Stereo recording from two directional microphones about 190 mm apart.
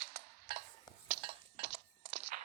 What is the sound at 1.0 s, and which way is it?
Cutlery, 55° right (ahead or behind).